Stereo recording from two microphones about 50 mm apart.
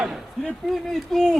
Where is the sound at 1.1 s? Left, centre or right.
Centre.